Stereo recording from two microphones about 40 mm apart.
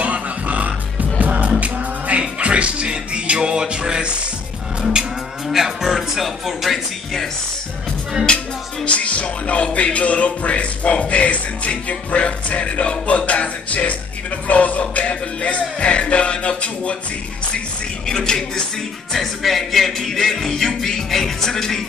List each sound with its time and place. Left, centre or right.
0.0 s music: right
5.5 s speech: centre
8.8 s speech: left
18.0 s speech: centre
19.1 s speech: centre
20.1 s music: centre